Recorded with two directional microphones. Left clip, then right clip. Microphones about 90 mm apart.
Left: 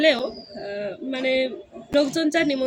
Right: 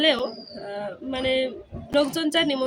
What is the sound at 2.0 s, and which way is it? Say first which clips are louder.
Speech: left 1 dB; 15° right (ahead or behind).